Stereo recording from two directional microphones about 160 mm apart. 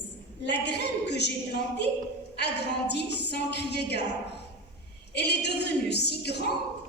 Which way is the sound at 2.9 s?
90° left.